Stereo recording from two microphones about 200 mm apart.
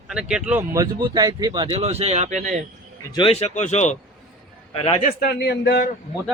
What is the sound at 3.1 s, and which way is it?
A man's voice, 25° left (ahead or behind).